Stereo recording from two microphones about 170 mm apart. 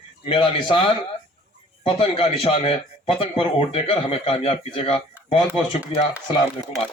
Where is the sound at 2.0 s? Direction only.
35° left (ahead or behind).